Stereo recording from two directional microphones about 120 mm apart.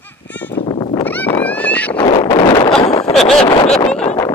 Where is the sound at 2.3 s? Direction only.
40° left (ahead or behind).